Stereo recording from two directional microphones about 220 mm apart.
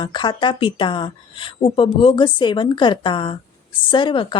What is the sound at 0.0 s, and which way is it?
Speech, 20° left (ahead or behind).